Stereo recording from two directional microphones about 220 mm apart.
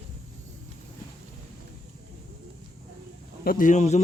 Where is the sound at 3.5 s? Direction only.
35° left (ahead or behind).